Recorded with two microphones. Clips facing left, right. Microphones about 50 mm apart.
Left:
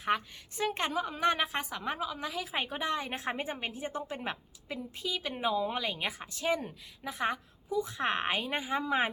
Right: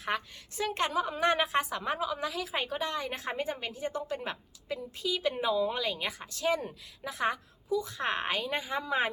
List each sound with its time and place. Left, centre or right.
0.0 s a woman's voice: centre
5.4 s a woman's voice: centre